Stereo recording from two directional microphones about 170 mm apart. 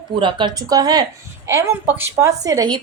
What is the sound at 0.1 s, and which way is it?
A woman's voice, 30° right (ahead or behind).